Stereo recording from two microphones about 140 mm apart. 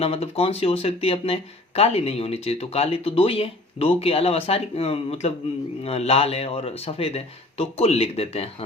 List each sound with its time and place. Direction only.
0.0 s speech: 45° left (ahead or behind)